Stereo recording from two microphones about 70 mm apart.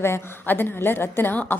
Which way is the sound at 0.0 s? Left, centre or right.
Left.